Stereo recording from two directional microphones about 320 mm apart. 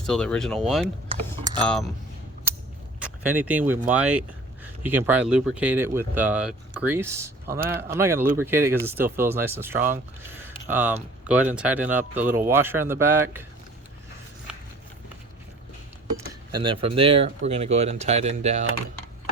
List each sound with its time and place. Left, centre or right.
0.0 s speech: centre
1.0 s cutlery: centre
3.0 s speech: centre
14.5 s a sound: centre
16.1 s speech: centre